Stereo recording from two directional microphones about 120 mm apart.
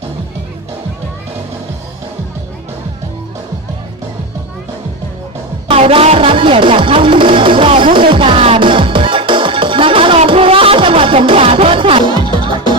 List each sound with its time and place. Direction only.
5.6 s speech: 50° right (ahead or behind)
7.9 s music: 45° right (ahead or behind)